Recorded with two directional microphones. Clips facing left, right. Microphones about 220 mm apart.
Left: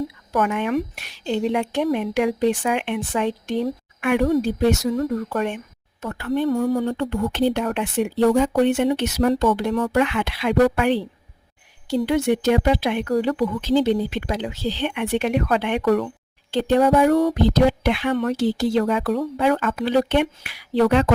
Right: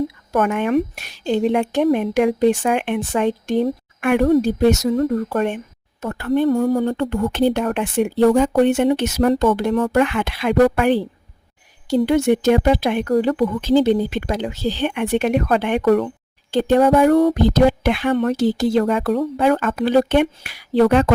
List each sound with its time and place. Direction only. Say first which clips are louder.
0.3 s speech: right 4 dB; 50° right (ahead or behind)